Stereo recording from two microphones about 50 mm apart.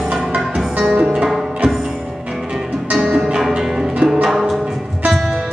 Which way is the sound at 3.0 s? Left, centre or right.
Centre.